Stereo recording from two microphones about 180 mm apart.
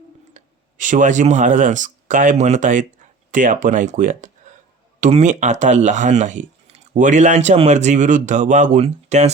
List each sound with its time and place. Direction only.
0.3 s speech: 45° right (ahead or behind)